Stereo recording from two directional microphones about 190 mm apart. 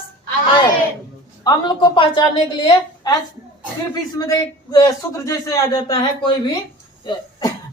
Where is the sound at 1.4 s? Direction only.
25° left (ahead or behind).